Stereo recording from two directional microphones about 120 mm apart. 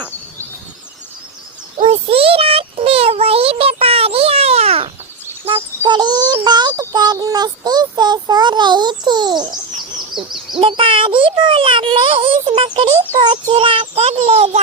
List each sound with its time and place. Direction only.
1.8 s child singing: 50° right (ahead or behind)
5.5 s a sound: 45° right (ahead or behind)
10.6 s a child's voice: 45° right (ahead or behind)